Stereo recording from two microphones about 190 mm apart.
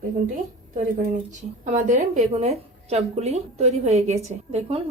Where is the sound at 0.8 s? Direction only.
40° right (ahead or behind).